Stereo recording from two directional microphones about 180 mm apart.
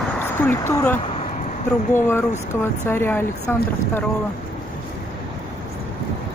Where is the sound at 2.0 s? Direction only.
15° left (ahead or behind).